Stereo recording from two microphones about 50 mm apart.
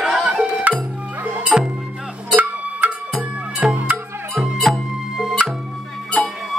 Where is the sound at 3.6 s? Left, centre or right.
Centre.